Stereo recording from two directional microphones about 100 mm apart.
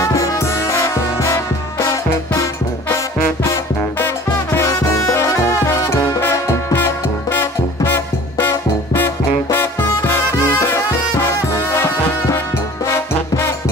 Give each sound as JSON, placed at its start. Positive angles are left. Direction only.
{"t": 0.0, "sound": "music", "side_deg": 35}